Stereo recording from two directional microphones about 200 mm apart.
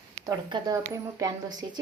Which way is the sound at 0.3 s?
15° right (ahead or behind).